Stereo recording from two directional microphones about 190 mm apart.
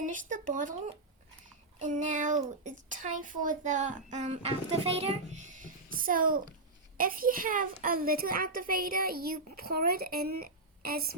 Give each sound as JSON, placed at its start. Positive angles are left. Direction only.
{"t": 0.0, "sound": "a child's voice", "side_deg": -45}
{"t": 1.8, "sound": "child singing", "side_deg": -40}
{"t": 2.9, "sound": "a child's voice", "side_deg": -45}